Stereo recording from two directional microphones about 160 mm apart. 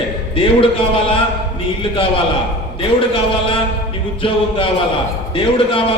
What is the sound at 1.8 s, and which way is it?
A man's voice, 30° left (ahead or behind).